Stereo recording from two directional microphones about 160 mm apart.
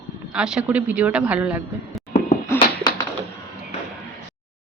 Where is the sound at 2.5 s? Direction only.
15° left (ahead or behind).